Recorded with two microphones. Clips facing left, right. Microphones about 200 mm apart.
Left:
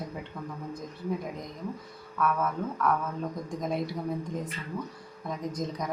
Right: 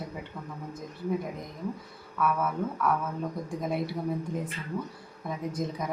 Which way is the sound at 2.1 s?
5° right (ahead or behind).